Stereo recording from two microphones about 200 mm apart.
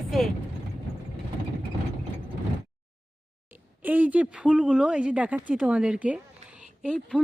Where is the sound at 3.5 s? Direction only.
10° right (ahead or behind).